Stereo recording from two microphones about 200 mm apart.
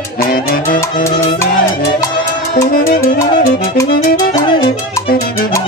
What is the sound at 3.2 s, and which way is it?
Music, 15° left (ahead or behind).